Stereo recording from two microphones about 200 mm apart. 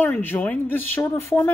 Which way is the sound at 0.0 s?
10° left (ahead or behind).